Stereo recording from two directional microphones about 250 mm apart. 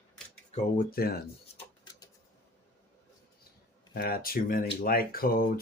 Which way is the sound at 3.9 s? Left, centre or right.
Left.